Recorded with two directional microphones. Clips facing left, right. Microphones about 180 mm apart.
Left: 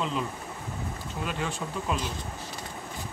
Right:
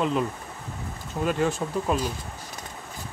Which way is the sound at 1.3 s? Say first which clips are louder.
Right 9 dB; 45° right (ahead or behind).